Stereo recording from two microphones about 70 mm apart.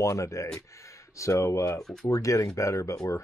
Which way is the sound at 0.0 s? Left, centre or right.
Left.